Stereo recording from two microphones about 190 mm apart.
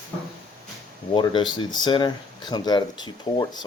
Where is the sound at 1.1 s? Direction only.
25° left (ahead or behind).